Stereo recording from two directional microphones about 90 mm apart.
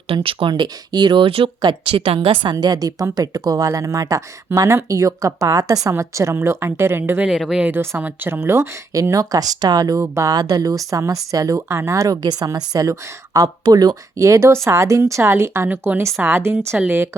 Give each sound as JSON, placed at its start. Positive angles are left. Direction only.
{"t": 0.1, "sound": "speech", "side_deg": -85}
{"t": 0.5, "sound": "a woman's voice", "side_deg": -50}
{"t": 7.3, "sound": "speech", "side_deg": -5}
{"t": 7.6, "sound": "a woman's voice", "side_deg": -20}